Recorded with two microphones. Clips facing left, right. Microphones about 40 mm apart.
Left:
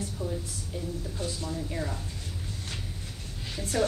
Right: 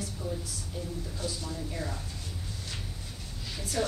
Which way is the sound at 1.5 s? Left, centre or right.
Centre.